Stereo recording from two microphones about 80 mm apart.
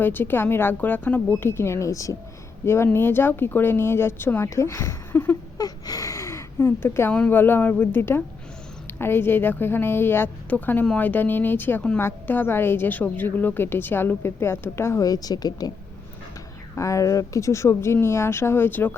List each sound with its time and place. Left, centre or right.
0.0 s a woman's voice: left
2.6 s speech: left
5.1 s a woman's voice: left
5.5 s gasp: left
7.1 s a woman's voice: centre
15.0 s speech: left
16.7 s speech: left